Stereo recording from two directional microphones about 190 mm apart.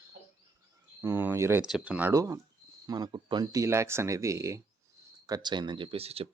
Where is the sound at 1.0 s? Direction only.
10° right (ahead or behind).